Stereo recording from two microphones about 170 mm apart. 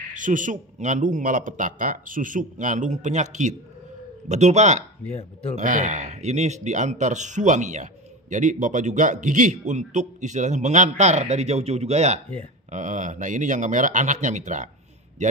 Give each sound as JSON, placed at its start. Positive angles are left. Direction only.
{"t": 0.1, "sound": "a man's voice", "side_deg": -50}